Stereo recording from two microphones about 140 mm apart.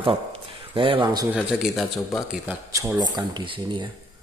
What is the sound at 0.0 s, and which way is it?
Speech, 40° right (ahead or behind).